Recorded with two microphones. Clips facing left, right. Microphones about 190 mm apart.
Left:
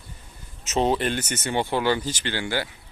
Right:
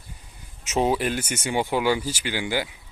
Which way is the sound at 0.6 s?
10° right (ahead or behind).